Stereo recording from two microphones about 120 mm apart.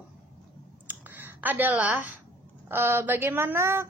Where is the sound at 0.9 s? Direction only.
15° right (ahead or behind).